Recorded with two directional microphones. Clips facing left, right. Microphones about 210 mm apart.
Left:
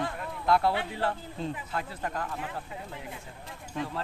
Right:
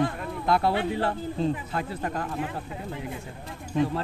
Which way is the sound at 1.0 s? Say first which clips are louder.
Right 6 dB; 25° right (ahead or behind).